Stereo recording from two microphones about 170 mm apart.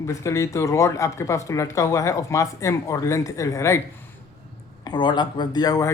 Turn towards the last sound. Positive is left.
turn(degrees=20)  # may be behind; listen again after turning